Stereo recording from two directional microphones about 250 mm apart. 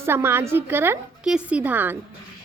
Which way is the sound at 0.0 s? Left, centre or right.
Centre.